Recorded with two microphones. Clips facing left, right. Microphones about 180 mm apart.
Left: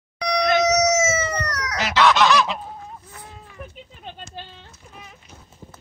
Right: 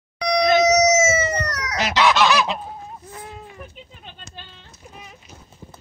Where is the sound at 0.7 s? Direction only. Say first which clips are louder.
Right 3 dB; 10° right (ahead or behind).